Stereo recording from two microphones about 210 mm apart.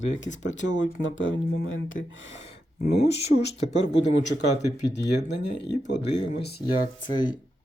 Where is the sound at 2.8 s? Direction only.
55° left (ahead or behind).